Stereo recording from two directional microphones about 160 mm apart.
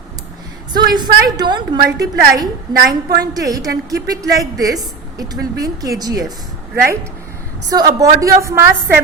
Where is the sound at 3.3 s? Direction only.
20° right (ahead or behind).